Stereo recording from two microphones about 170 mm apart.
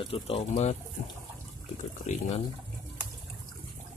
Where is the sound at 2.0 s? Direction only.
40° left (ahead or behind).